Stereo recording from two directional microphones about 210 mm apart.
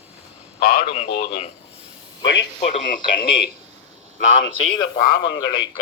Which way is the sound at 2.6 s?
40° left (ahead or behind).